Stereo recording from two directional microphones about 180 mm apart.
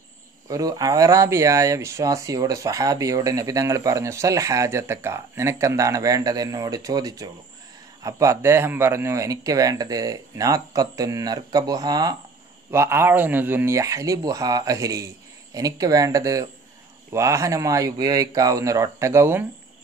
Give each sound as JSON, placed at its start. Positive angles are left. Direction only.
{"t": 0.5, "sound": "speech", "side_deg": -20}